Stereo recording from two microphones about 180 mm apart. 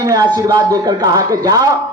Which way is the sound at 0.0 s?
20° right (ahead or behind).